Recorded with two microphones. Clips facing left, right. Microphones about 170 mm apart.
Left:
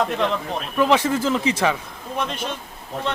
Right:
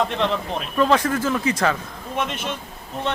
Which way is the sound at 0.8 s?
10° left (ahead or behind).